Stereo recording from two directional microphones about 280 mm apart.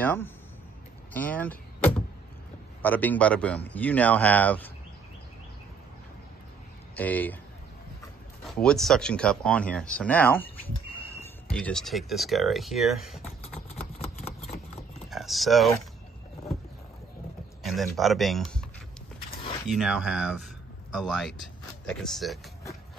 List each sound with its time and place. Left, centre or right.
0.0 s speech: centre
1.1 s vehicle: centre
2.8 s speech: centre
7.0 s speech: centre
8.5 s speech: centre
13.2 s a sound: left
15.0 s speech: centre
17.6 s speech: centre
19.7 s speech: centre